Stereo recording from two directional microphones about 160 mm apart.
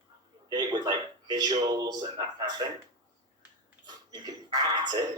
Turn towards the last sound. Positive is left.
turn(degrees=-25)  # may be behind; listen again after turning